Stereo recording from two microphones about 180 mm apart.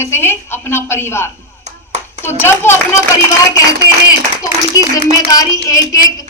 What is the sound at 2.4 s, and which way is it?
Speech, 15° left (ahead or behind).